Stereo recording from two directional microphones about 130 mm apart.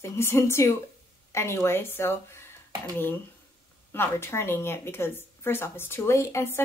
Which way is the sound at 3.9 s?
20° left (ahead or behind).